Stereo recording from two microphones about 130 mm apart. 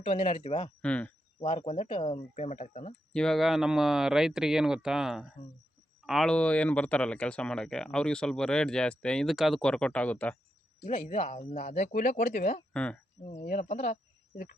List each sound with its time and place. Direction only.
0.0 s speech: 50° left (ahead or behind)
0.8 s speech: 10° left (ahead or behind)
1.4 s speech: 50° left (ahead or behind)
3.1 s speech: 5° left (ahead or behind)
11.1 s speech: 55° left (ahead or behind); by 12.6 s 75° left (ahead or behind)
12.7 s speech: 10° left (ahead or behind)
13.2 s speech: 70° left (ahead or behind)